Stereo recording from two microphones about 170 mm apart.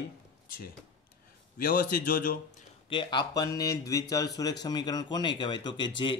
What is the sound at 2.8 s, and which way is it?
Speech, 30° left (ahead or behind).